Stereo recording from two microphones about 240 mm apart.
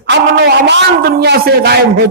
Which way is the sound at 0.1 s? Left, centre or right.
Right.